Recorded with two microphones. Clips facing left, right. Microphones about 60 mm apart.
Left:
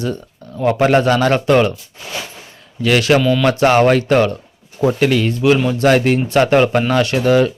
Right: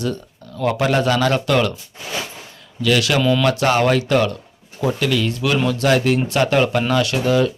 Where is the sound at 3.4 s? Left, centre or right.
Left.